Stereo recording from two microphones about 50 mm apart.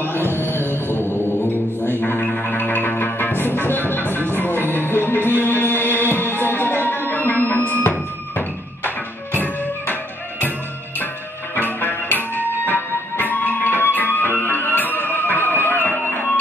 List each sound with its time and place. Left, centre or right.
0.0 s music: left
11.5 s music: left